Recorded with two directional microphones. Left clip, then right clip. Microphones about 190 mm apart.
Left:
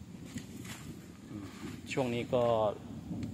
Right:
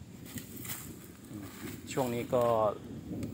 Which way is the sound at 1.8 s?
Centre (ahead or behind).